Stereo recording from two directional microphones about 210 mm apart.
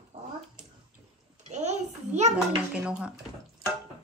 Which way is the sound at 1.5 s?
35° right (ahead or behind).